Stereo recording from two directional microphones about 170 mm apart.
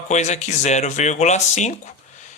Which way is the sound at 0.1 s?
45° left (ahead or behind).